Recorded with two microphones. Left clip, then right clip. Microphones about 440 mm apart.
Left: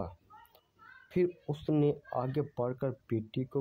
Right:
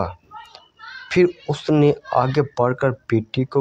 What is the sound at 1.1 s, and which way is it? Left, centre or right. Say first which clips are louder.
Speech: right 14 dB; left.